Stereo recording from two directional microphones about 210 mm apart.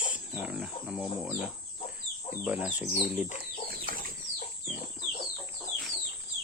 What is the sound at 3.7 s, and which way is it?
Bird flight, 45° right (ahead or behind).